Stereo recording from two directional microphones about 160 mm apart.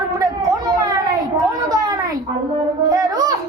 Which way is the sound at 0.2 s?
20° right (ahead or behind).